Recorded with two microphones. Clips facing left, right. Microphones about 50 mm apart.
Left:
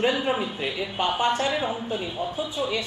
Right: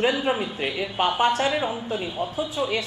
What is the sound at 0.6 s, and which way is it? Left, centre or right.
A woman's voice, centre.